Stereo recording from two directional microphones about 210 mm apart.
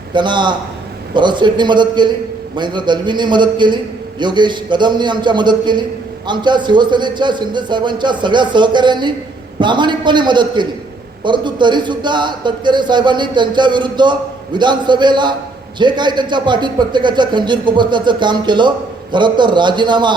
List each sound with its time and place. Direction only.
0.1 s a man's voice: 20° right (ahead or behind)